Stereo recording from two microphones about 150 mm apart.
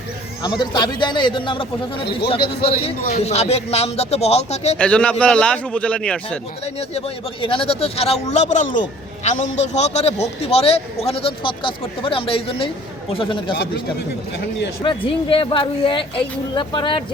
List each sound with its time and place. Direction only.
0.6 s speech: 30° left (ahead or behind); by 4.8 s 45° left (ahead or behind)
4.8 s a man's voice: 10° left (ahead or behind)
6.7 s speech: 40° left (ahead or behind)
14.8 s speech: 35° left (ahead or behind)